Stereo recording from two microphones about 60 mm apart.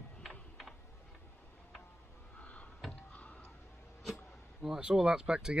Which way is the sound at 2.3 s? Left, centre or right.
Left.